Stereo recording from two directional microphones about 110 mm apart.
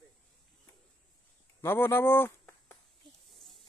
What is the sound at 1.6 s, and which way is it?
Speech, 20° left (ahead or behind).